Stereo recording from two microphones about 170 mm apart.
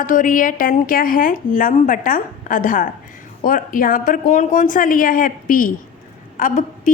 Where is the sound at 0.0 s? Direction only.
50° left (ahead or behind).